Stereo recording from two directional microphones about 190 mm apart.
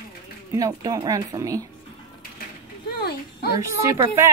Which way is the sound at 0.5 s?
20° right (ahead or behind).